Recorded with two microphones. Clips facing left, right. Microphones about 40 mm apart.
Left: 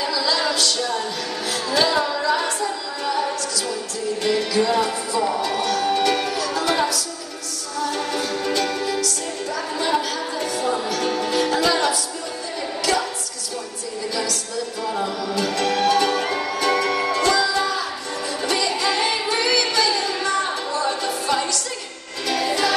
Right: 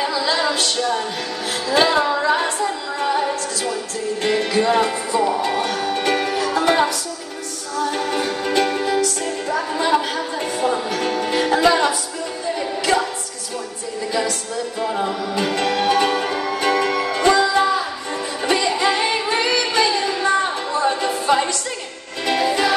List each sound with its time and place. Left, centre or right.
0.0 s music: right
14.1 s music: right